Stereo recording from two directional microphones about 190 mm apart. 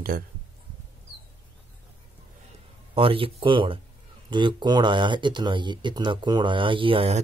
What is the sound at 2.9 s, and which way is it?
Speech, 30° right (ahead or behind).